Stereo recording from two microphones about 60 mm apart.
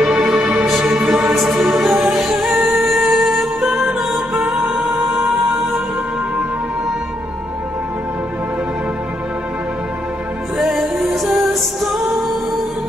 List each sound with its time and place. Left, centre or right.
0.0 s music: centre
1.3 s music: centre
10.6 s music: centre